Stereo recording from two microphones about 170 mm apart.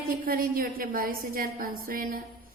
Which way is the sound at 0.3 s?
60° right (ahead or behind).